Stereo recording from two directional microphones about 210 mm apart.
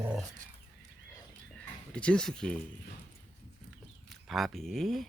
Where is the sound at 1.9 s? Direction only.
5° left (ahead or behind).